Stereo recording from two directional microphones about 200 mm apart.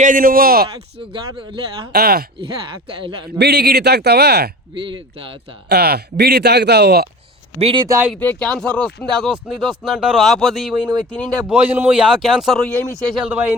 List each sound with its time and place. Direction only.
0.0 s speech: 45° right (ahead or behind)
0.9 s speech: 25° right (ahead or behind)
1.9 s speech: 50° right (ahead or behind)
3.3 s speech: 55° right (ahead or behind)
4.7 s speech: 25° right (ahead or behind)
5.6 s speech: 55° right (ahead or behind)
7.6 s speech: 25° right (ahead or behind)
8.1 s speech: 5° left (ahead or behind)